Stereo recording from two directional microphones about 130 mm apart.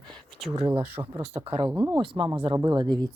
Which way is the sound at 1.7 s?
15° right (ahead or behind).